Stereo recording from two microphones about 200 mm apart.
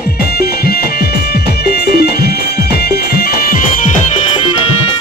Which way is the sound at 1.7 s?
55° left (ahead or behind).